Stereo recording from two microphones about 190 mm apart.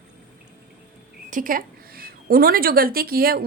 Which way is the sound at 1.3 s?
45° right (ahead or behind).